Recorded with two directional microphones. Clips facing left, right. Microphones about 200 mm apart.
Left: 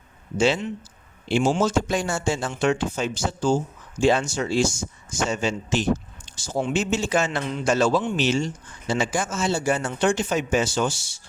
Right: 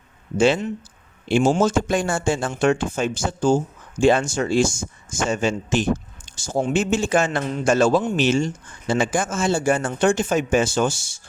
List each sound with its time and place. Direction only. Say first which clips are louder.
0.3 s speech: right 3 dB; 55° right (ahead or behind)